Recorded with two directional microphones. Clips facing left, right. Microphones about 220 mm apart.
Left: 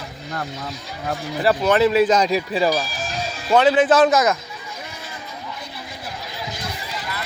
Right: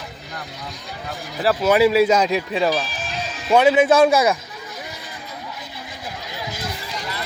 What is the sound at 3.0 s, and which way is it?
Music, 45° left (ahead or behind).